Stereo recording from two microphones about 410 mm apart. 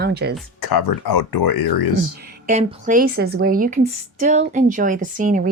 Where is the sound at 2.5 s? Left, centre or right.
Centre.